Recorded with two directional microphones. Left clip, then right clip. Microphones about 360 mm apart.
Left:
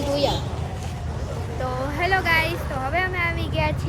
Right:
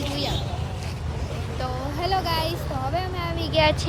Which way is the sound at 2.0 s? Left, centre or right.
Centre.